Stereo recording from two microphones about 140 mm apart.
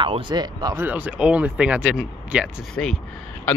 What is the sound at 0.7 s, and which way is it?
Speech, 10° right (ahead or behind).